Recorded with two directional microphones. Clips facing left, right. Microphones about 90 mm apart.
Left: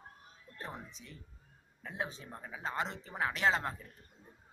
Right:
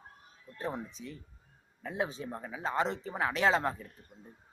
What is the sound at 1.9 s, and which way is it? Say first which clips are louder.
Speech: right 6 dB; 20° right (ahead or behind).